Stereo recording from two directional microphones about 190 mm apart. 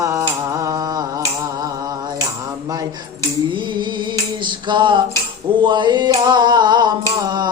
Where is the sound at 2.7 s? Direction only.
20° right (ahead or behind).